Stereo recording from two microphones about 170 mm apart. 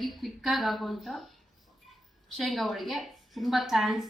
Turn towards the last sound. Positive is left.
turn(degrees=0)  # may be behind; listen again after turning